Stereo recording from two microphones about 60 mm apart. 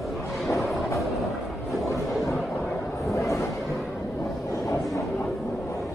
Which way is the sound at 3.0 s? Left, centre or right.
Left.